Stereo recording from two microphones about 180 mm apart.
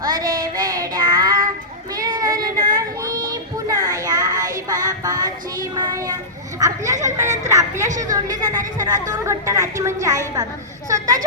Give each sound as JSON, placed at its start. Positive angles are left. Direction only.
{"t": 0.0, "sound": "child singing", "side_deg": -20}
{"t": 2.0, "sound": "a sound", "side_deg": -20}
{"t": 2.7, "sound": "child singing", "side_deg": -20}
{"t": 6.6, "sound": "a woman's voice", "side_deg": -20}